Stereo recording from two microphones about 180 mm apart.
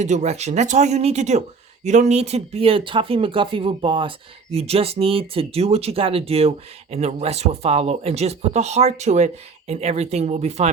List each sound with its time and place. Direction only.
0.0 s speech: 40° right (ahead or behind)